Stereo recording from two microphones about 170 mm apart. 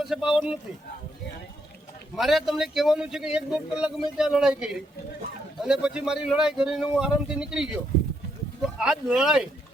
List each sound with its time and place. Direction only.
0.0 s a man's voice: 5° right (ahead or behind)
2.1 s a man's voice: centre (ahead or behind)